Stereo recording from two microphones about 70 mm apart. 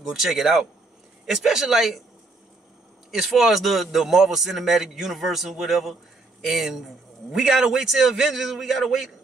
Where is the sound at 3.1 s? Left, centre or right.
Centre.